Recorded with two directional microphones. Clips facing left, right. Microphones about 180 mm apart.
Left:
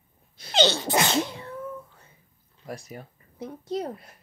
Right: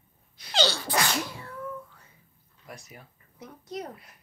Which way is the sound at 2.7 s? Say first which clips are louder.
Left 8 dB; 40° left (ahead or behind).